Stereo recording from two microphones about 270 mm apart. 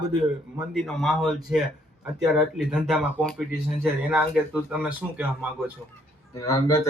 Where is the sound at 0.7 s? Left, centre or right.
Centre.